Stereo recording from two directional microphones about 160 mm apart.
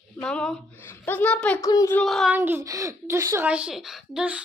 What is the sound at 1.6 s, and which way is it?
Speech, 20° left (ahead or behind).